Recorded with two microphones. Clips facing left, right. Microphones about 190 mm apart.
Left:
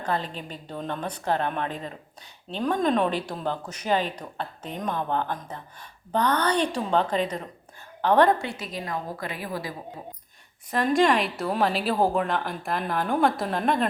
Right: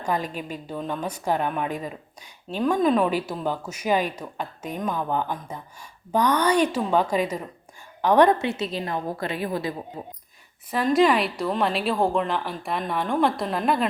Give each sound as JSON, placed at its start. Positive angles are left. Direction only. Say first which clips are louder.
{"t": 0.0, "sound": "a woman's voice", "louder": "right 2 dB", "side_deg": -10}
{"t": 10.7, "sound": "a woman's voice", "louder": "right 2 dB", "side_deg": 0}